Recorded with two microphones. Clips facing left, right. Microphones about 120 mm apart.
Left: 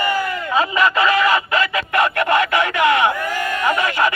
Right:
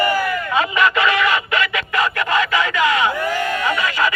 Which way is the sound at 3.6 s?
45° left (ahead or behind).